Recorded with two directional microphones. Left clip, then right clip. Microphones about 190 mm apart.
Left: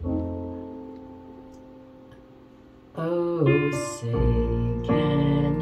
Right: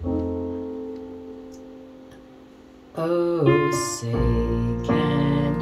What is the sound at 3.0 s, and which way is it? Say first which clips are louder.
Music: right 3 dB; 20° right (ahead or behind).